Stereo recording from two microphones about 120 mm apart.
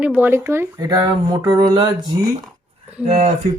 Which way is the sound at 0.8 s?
35° right (ahead or behind).